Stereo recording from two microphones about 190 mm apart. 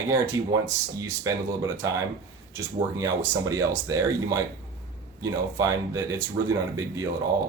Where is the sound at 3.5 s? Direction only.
15° right (ahead or behind).